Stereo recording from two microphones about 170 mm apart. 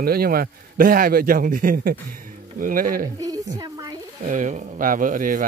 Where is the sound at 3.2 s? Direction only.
20° right (ahead or behind).